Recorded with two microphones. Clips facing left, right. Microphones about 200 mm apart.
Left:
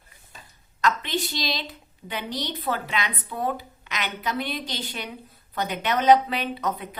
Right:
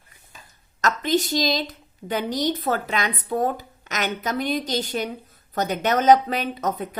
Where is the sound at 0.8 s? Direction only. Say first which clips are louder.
Right 4 dB; 45° right (ahead or behind).